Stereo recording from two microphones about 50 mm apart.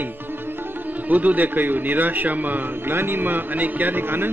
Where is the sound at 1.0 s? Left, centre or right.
Right.